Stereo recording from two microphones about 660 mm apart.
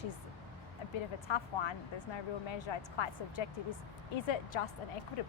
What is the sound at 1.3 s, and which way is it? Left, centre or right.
A woman's voice, left.